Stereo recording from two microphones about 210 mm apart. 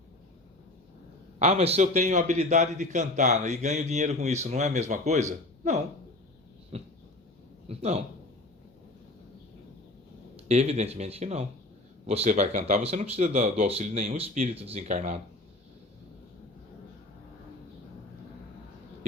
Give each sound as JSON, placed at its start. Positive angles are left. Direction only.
{"t": 1.4, "sound": "a man's voice", "side_deg": -30}
{"t": 6.7, "sound": "dog", "side_deg": -30}
{"t": 7.7, "sound": "a sound", "side_deg": -30}
{"t": 10.3, "sound": "a man's voice", "side_deg": -30}